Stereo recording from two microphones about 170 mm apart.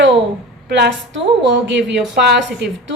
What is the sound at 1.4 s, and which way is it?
Speech, 90° right.